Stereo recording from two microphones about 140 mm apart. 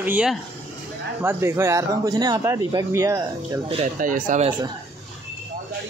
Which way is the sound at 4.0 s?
70° right (ahead or behind).